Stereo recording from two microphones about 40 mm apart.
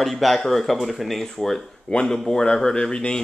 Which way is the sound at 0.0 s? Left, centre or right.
Centre.